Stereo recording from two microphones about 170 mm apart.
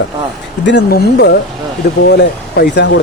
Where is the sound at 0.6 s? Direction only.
85° left.